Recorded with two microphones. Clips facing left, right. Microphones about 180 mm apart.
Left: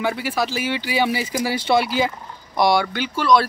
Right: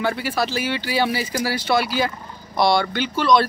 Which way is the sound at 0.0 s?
10° left (ahead or behind).